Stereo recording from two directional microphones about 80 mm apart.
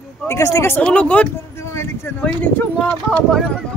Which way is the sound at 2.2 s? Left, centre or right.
Left.